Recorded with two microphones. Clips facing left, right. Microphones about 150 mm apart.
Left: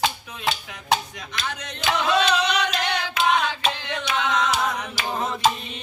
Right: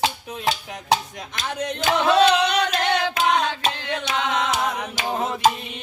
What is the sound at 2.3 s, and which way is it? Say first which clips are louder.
Music: right 3 dB; 55° right (ahead or behind).